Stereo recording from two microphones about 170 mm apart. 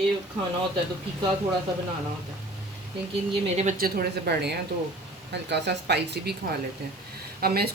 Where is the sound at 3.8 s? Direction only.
65° right (ahead or behind).